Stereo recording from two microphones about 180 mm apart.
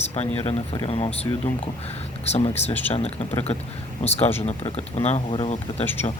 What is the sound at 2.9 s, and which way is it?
Speech, 35° left (ahead or behind).